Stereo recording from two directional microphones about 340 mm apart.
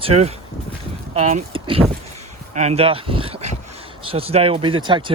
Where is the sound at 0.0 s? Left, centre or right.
Centre.